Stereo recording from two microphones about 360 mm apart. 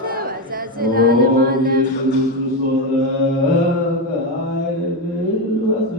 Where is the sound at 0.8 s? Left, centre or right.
Right.